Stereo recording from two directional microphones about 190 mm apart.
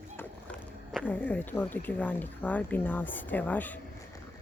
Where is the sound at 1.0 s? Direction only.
10° left (ahead or behind).